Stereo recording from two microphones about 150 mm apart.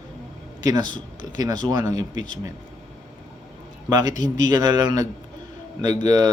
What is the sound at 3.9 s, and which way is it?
Speech, 25° right (ahead or behind).